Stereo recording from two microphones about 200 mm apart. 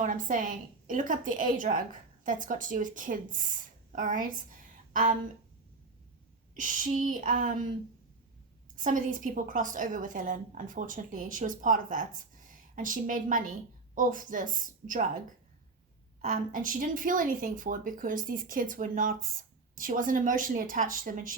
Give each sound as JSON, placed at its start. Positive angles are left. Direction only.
{"t": 0.0, "sound": "a woman's voice", "side_deg": -40}
{"t": 6.5, "sound": "a woman's voice", "side_deg": -40}
{"t": 8.7, "sound": "a woman's voice", "side_deg": -40}
{"t": 16.2, "sound": "a woman's voice", "side_deg": -40}